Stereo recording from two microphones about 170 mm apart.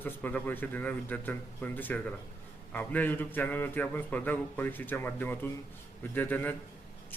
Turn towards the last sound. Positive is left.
turn(degrees=10)  # may be behind; listen again after turning